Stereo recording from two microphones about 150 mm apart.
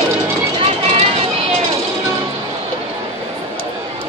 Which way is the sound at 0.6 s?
40° right (ahead or behind).